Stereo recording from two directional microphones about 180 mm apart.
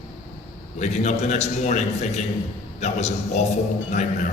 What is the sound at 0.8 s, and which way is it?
A man's voice, 40° left (ahead or behind).